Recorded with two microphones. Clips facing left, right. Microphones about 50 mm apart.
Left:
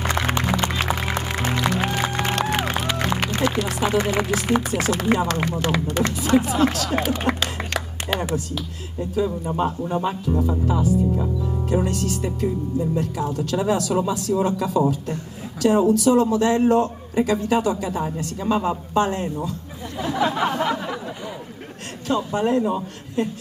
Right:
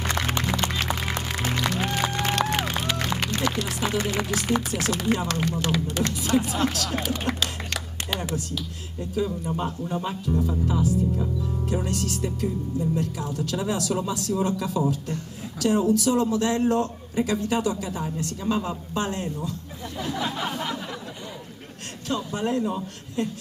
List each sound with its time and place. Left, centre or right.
0.0 s music: left
4.5 s a man's voice: centre
20.0 s a sound: left
22.0 s a man's voice: centre